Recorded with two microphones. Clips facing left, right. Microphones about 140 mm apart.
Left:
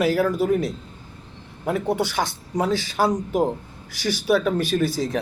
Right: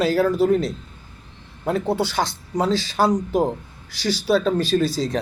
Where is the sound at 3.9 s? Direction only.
15° left (ahead or behind).